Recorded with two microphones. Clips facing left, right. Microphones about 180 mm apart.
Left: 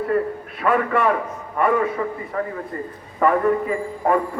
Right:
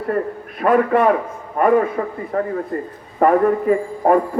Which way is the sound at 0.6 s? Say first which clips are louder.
Right 5 dB; 40° right (ahead or behind).